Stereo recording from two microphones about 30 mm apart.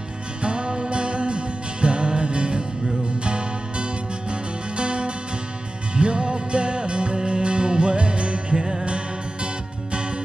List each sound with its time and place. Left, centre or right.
0.4 s music: right